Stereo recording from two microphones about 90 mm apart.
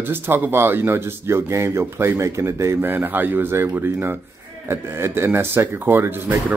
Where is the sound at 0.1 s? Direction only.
25° right (ahead or behind).